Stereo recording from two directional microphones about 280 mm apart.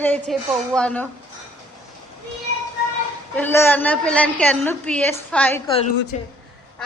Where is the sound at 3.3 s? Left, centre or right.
Centre.